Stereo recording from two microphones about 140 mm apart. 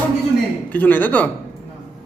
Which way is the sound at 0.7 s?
10° left (ahead or behind).